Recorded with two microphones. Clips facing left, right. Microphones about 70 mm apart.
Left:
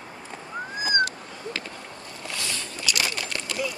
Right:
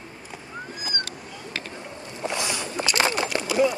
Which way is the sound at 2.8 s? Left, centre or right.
Right.